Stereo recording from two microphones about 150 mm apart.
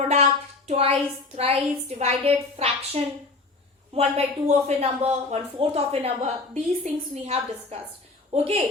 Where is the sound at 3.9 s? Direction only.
45° right (ahead or behind).